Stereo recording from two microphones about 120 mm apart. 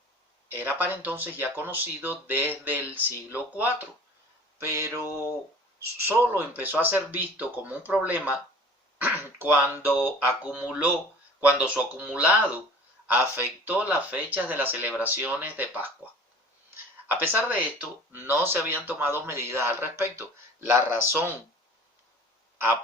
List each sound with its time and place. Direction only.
0.4 s speech: 15° right (ahead or behind)
4.7 s speech: 25° right (ahead or behind)
6.1 s speech: 15° right (ahead or behind)
17.1 s speech: 15° right (ahead or behind)